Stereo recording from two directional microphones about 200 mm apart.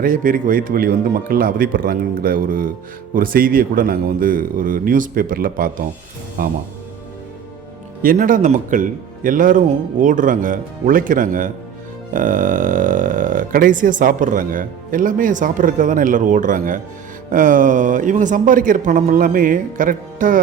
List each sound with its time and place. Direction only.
0.0 s speech: 45° right (ahead or behind)
8.0 s speech: 40° right (ahead or behind)